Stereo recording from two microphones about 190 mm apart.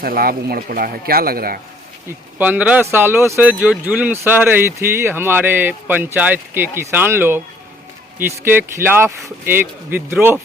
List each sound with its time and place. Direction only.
0.0 s speech: 50° right (ahead or behind)
2.4 s speech: 10° right (ahead or behind)